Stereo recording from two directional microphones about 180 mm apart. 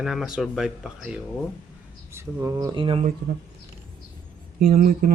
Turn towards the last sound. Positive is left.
turn(degrees=-50)  # may be behind; listen again after turning